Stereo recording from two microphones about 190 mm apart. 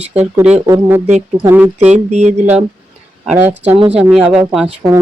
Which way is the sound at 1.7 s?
35° right (ahead or behind).